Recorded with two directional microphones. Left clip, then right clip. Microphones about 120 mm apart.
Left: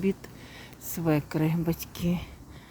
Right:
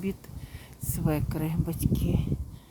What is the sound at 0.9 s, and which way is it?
Speech, 5° left (ahead or behind).